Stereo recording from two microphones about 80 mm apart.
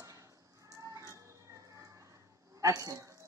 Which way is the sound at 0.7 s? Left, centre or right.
Right.